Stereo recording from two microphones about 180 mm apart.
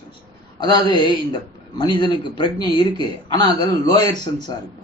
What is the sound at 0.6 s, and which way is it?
Speech, 25° left (ahead or behind).